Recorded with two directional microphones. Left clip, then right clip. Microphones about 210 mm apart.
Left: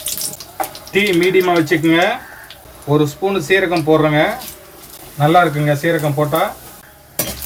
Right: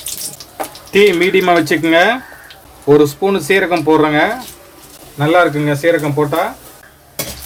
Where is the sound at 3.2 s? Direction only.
50° right (ahead or behind).